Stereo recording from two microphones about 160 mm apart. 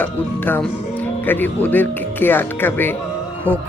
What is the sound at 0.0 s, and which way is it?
Speech, 10° left (ahead or behind).